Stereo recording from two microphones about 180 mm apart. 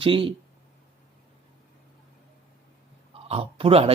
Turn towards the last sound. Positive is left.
turn(degrees=-35)  # may be behind; listen again after turning